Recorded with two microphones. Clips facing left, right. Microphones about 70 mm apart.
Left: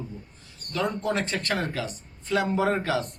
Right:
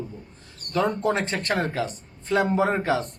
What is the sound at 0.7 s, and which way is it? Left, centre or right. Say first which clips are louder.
Speech: right 4 dB; right.